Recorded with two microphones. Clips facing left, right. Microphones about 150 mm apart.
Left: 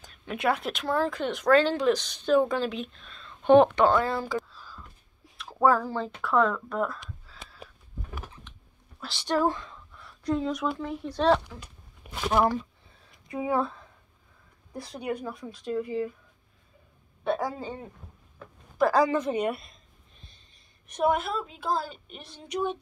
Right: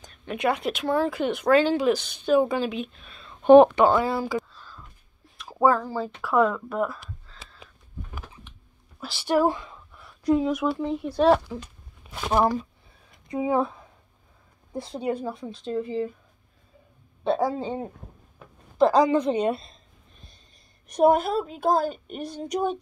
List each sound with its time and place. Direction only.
0.0 s speech: centre (ahead or behind)
5.4 s a sound: centre (ahead or behind)
5.8 s speech: 5° right (ahead or behind)
9.0 s speech: 5° right (ahead or behind)
13.3 s speech: 20° right (ahead or behind)
14.7 s speech: 25° right (ahead or behind)
17.2 s speech: 25° right (ahead or behind)
20.9 s a woman's voice: 40° right (ahead or behind)